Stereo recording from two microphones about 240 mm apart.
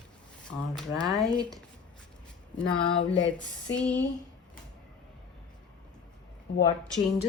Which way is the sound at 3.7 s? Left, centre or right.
Centre.